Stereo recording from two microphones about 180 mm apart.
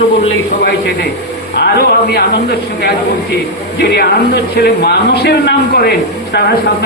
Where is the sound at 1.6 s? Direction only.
60° left (ahead or behind).